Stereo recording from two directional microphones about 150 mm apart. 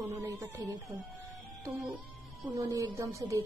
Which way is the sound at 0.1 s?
20° right (ahead or behind).